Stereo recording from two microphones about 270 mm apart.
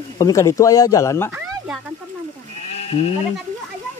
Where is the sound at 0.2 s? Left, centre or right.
Centre.